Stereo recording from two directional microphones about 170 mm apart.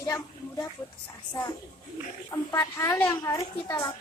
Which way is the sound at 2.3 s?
15° left (ahead or behind).